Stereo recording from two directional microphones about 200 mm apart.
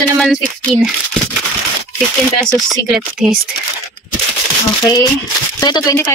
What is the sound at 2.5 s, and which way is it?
Speech, centre (ahead or behind).